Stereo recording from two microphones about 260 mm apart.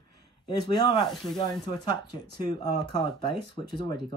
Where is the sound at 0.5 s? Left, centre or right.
Centre.